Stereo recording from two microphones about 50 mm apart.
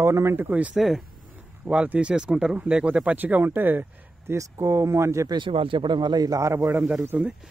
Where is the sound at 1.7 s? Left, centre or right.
Right.